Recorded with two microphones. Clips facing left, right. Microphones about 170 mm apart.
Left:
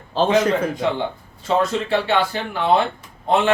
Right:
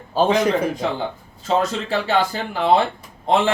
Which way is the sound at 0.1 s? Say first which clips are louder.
Right 1 dB; 10° right (ahead or behind).